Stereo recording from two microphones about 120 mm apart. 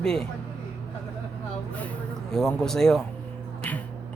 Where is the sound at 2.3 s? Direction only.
5° left (ahead or behind).